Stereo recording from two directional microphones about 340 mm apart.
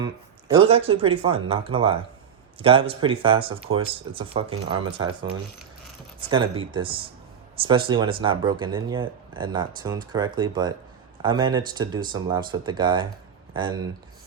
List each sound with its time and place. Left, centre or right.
0.0 s speech: centre
6.1 s speech: centre